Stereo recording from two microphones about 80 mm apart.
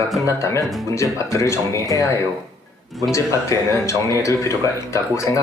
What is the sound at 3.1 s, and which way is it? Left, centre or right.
Speech, left.